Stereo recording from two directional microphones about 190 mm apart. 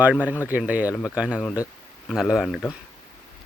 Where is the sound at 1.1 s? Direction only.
5° right (ahead or behind).